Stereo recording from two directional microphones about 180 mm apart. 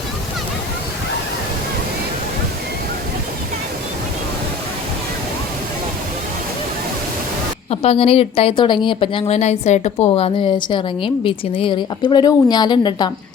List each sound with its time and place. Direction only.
7.7 s a woman's voice: 35° left (ahead or behind)
10.1 s a woman's voice: 30° left (ahead or behind)